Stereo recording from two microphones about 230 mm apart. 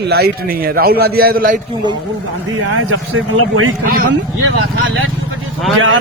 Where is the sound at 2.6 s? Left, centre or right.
Right.